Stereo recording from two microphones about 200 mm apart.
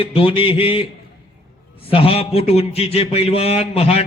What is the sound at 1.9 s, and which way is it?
A man's voice, 30° left (ahead or behind).